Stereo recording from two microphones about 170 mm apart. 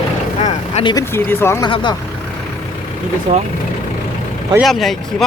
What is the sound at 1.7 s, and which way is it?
Speech, 25° left (ahead or behind).